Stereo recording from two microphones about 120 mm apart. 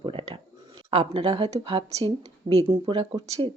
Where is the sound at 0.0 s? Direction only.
50° right (ahead or behind).